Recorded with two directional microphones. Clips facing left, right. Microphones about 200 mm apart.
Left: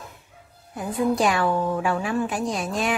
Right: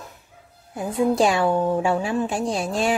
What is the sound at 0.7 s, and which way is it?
A woman's voice, 30° right (ahead or behind).